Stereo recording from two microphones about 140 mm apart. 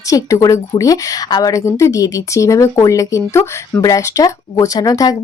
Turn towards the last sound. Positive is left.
turn(degrees=25)  # may be behind; listen again after turning